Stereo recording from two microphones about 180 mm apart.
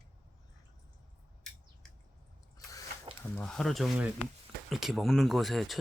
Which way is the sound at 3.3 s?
5° left (ahead or behind).